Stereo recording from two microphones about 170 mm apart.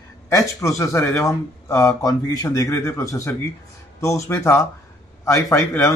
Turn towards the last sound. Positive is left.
turn(degrees=15)  # may be behind; listen again after turning